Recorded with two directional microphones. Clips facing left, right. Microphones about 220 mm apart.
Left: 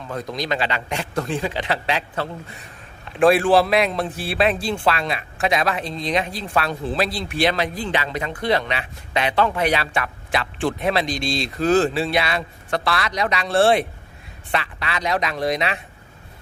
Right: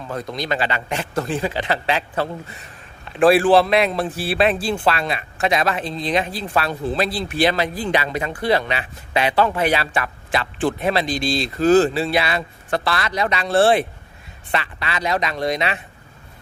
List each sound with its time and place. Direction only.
0.1 s speech: centre (ahead or behind)
3.2 s speech: 5° right (ahead or behind)